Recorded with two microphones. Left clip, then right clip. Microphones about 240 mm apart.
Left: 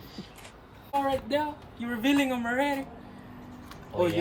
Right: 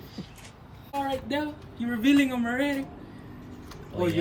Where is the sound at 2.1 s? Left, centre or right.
Left.